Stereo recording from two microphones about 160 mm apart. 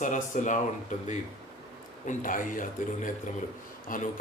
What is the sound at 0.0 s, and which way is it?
Speech, 55° left (ahead or behind).